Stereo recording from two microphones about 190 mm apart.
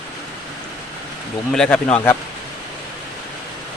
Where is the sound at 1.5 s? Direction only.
5° left (ahead or behind).